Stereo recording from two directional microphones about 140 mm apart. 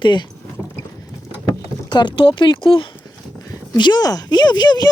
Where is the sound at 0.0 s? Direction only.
35° left (ahead or behind).